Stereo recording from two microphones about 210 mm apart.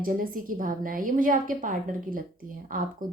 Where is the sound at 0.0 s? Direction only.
40° right (ahead or behind).